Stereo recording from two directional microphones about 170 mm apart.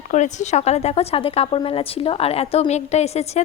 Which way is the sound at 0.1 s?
45° left (ahead or behind).